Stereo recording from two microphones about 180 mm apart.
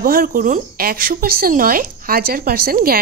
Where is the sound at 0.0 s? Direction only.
55° right (ahead or behind).